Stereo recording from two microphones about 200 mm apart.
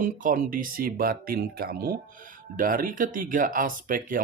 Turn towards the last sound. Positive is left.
turn(degrees=-40)  # may be behind; listen again after turning